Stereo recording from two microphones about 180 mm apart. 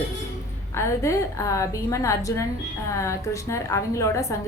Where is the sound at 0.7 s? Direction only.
15° left (ahead or behind).